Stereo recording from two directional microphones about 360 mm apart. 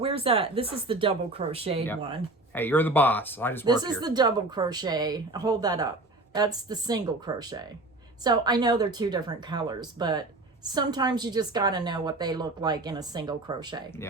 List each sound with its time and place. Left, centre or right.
0.0 s speech: centre
2.6 s speech: centre
3.7 s speech: centre